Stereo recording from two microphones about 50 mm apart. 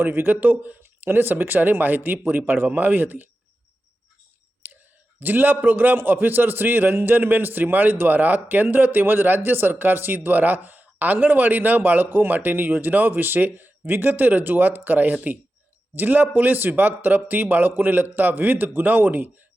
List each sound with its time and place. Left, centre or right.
0.0 s a man's voice: right
0.8 s a man's voice: right
5.2 s a man's voice: right